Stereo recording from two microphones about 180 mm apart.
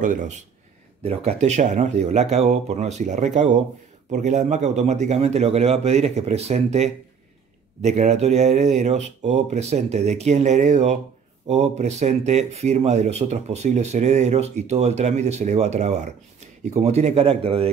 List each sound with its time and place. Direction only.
0.0 s speech: 45° right (ahead or behind)